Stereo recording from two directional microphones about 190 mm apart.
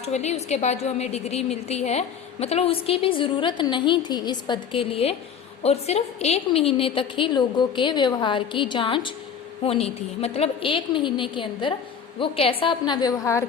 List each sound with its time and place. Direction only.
0.0 s a woman's voice: 35° left (ahead or behind); by 13.4 s 15° left (ahead or behind)